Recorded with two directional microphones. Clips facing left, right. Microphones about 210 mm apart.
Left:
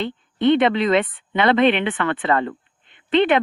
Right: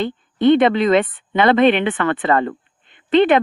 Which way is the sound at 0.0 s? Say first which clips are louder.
Right 3 dB; 45° right (ahead or behind).